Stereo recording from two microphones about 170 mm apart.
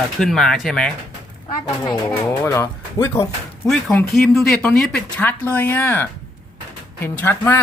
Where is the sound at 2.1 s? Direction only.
15° left (ahead or behind).